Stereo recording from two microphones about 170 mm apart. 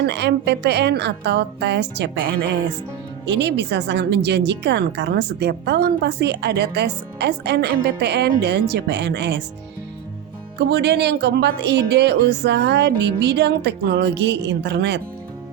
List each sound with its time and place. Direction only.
0.0 s a woman's voice: 85° right
3.2 s a woman's voice: 90° right
10.6 s a woman's voice: 80° right